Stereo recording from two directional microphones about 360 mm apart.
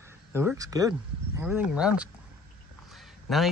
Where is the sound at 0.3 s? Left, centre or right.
Centre.